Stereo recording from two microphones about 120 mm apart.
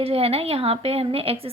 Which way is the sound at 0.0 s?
55° right (ahead or behind).